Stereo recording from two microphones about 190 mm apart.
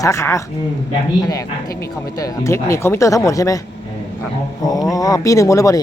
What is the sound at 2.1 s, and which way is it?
Speech, 15° left (ahead or behind).